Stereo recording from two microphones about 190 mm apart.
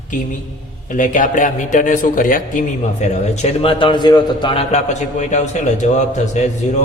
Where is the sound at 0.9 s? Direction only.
45° left (ahead or behind).